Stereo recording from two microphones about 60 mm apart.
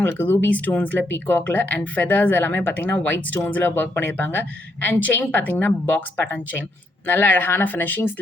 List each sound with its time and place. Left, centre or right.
0.0 s speech: left